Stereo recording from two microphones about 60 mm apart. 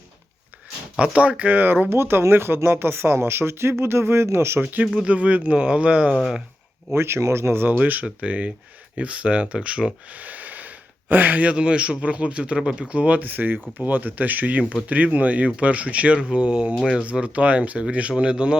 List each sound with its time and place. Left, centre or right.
0.9 s speech: centre; by 4.6 s right
4.6 s speech: right
6.9 s speech: right
7.8 s speech: right